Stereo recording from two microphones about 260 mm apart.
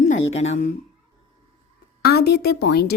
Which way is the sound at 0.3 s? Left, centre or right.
Left.